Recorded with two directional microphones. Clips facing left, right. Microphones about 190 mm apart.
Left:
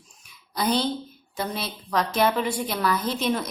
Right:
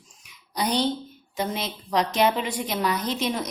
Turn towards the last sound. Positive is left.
turn(degrees=-15)  # may be behind; listen again after turning